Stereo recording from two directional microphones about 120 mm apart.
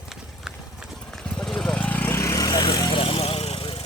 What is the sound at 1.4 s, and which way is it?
Vehicle, 5° left (ahead or behind).